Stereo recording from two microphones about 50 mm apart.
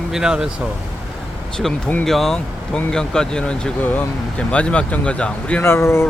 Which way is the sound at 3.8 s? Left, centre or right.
Left.